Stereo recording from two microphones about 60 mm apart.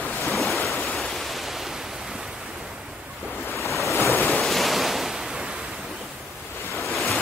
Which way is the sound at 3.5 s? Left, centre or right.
Left.